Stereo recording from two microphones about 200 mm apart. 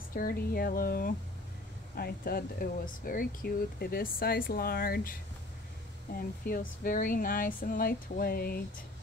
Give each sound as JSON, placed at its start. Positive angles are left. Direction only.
{"t": 0.1, "sound": "speech", "side_deg": 45}
{"t": 6.1, "sound": "speech", "side_deg": 45}